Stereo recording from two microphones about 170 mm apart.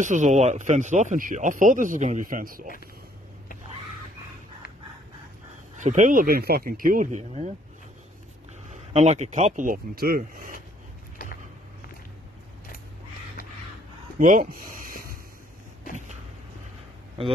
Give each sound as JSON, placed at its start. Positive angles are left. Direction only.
{"t": 0.0, "sound": "speech", "side_deg": -45}
{"t": 5.8, "sound": "speech", "side_deg": -45}
{"t": 8.6, "sound": "speech", "side_deg": -45}
{"t": 14.1, "sound": "a sound", "side_deg": -50}